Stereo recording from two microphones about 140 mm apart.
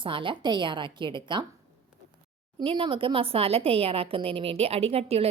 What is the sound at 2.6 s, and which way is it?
A woman's voice, 40° right (ahead or behind).